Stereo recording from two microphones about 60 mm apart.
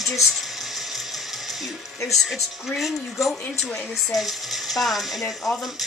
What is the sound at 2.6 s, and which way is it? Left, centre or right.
Speech, centre.